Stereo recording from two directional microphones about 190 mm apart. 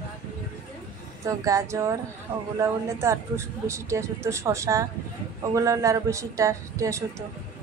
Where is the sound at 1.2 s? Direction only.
15° right (ahead or behind).